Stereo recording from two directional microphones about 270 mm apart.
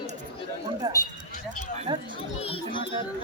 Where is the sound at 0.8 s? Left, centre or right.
Centre.